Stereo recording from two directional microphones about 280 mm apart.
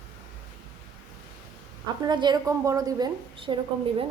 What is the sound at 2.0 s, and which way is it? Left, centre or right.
A woman's voice, centre.